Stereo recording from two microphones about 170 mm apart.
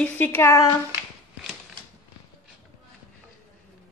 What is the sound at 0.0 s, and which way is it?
Speech, 10° left (ahead or behind).